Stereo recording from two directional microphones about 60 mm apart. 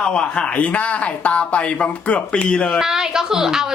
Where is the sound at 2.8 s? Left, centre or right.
Centre.